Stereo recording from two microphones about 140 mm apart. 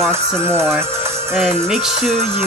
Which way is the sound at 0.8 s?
20° right (ahead or behind).